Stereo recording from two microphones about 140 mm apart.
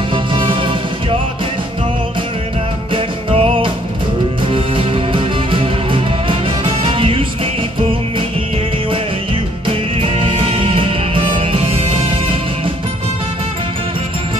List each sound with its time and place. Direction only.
0.1 s music: 35° right (ahead or behind)
2.9 s music: 40° right (ahead or behind)
8.9 s music: 40° right (ahead or behind)